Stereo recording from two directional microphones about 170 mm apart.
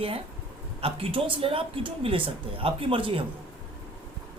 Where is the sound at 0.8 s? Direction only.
35° right (ahead or behind).